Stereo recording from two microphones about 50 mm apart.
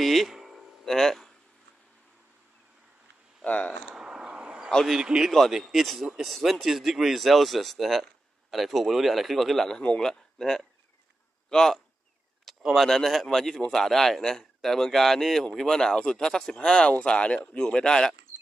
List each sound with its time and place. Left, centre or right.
0.0 s a sound: centre
0.8 s speech: centre
3.4 s speech: left
3.9 s a sound: centre
5.0 s a man's voice: centre
5.5 s speech: centre
9.8 s a man's voice: centre
12.5 s a sound: centre
12.8 s a man's voice: centre